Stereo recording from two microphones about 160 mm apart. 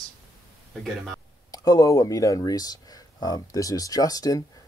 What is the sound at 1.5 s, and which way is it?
Speech, 20° left (ahead or behind).